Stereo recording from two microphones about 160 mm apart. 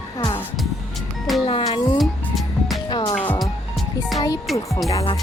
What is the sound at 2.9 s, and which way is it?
Music, 30° left (ahead or behind).